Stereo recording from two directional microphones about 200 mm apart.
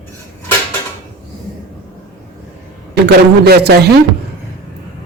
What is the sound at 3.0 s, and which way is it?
Speech, 50° right (ahead or behind).